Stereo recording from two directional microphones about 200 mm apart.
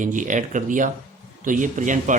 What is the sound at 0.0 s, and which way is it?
Speech, 40° right (ahead or behind).